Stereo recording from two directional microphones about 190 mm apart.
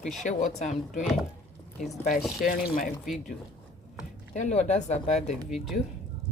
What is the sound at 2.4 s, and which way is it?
Speech, 50° left (ahead or behind).